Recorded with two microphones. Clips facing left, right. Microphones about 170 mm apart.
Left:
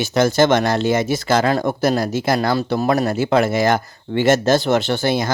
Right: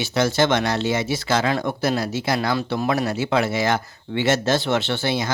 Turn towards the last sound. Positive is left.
turn(degrees=50)  # may be behind; listen again after turning